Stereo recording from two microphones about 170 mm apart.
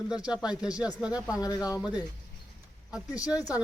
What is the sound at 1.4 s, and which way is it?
Speech, 20° left (ahead or behind).